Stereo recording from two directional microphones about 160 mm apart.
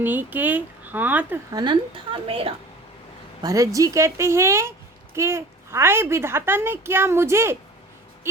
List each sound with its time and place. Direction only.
0.0 s a child's voice: 10° right (ahead or behind)
1.5 s a woman's voice: 30° right (ahead or behind)
3.4 s a child's voice: 20° right (ahead or behind)